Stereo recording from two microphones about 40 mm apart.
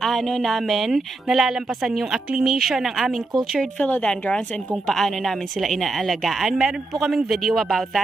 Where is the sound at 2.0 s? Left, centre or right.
Centre.